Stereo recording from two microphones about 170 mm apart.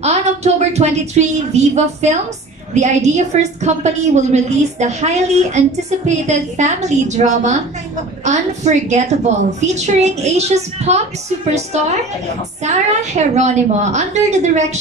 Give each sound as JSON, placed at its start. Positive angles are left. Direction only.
{"t": 0.0, "sound": "a woman's voice", "side_deg": -40}